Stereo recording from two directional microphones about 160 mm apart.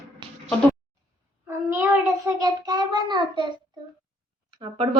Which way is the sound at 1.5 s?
15° right (ahead or behind).